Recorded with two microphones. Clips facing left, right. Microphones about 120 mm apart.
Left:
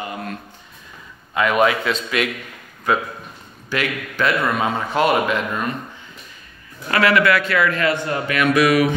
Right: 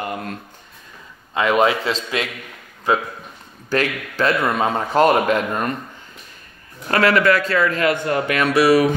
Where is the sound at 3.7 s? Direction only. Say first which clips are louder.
Right 3 dB; 35° right (ahead or behind).